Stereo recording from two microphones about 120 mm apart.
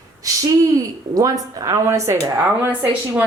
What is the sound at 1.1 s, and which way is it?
Speech, 30° right (ahead or behind).